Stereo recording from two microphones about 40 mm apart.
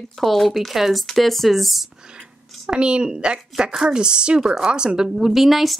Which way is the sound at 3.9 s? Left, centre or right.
Right.